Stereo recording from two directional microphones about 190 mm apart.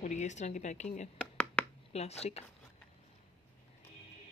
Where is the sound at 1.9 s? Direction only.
35° left (ahead or behind).